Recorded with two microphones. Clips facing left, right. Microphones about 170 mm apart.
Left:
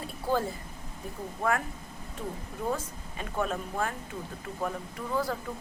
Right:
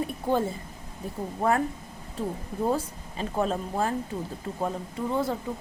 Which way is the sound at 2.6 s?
35° right (ahead or behind).